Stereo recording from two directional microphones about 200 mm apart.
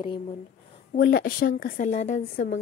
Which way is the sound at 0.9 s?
45° left (ahead or behind).